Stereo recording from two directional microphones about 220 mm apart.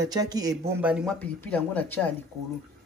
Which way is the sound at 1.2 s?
5° left (ahead or behind).